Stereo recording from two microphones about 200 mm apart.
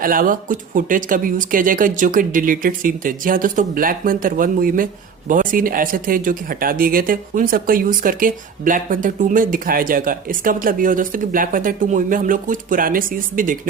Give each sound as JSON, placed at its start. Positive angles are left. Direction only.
{"t": 0.0, "sound": "speech", "side_deg": -45}